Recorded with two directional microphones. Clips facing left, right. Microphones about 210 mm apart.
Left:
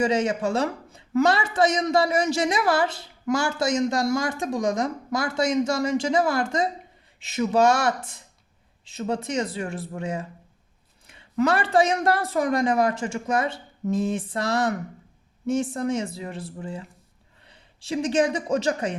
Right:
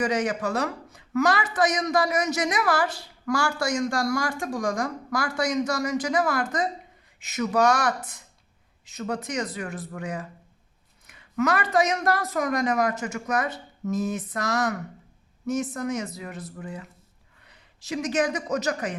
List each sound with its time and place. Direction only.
0.0 s a man's voice: 25° left (ahead or behind)